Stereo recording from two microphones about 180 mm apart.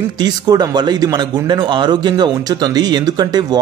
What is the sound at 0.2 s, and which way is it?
Speech, 20° right (ahead or behind).